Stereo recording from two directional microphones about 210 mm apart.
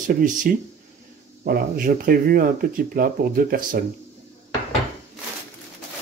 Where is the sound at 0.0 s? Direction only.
40° right (ahead or behind).